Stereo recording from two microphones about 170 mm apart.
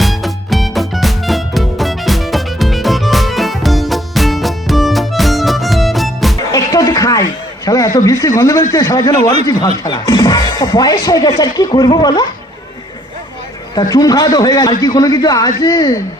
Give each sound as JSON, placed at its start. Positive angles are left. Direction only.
{"t": 0.0, "sound": "music", "side_deg": 0}
{"t": 6.5, "sound": "a sound", "side_deg": 20}
{"t": 8.7, "sound": "speech", "side_deg": 20}
{"t": 13.7, "sound": "speech", "side_deg": 20}